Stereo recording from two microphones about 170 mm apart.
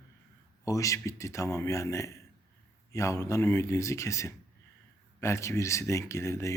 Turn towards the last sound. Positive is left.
turn(degrees=15)  # may be behind; listen again after turning